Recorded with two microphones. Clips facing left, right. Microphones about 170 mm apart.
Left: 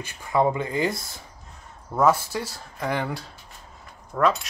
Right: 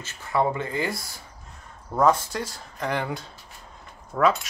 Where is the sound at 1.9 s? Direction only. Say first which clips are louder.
Even; 5° left (ahead or behind).